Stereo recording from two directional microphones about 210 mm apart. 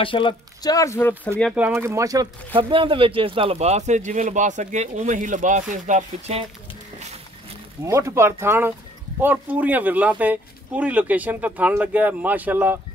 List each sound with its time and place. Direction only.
0.0 s speech: 25° left (ahead or behind)
1.5 s speech: 10° right (ahead or behind); by 6.4 s 35° right (ahead or behind)
7.8 s speech: 15° right (ahead or behind)